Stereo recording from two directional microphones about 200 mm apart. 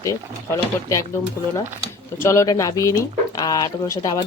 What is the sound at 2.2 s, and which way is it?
Speech, 15° left (ahead or behind).